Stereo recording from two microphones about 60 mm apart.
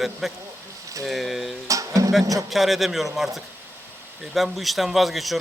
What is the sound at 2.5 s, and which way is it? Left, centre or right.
A man's voice, centre.